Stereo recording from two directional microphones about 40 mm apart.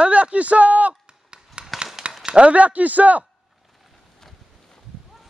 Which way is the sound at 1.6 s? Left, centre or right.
Right.